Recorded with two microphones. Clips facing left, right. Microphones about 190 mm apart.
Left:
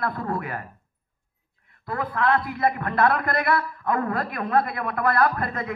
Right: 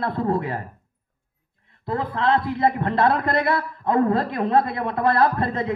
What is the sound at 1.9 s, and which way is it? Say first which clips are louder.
A man's voice: right 2 dB; 25° right (ahead or behind).